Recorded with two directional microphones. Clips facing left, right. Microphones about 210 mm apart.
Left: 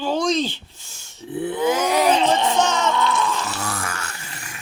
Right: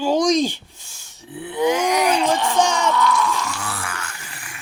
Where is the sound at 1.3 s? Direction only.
40° left (ahead or behind).